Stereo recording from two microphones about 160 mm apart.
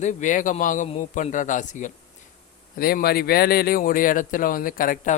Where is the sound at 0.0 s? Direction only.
50° left (ahead or behind).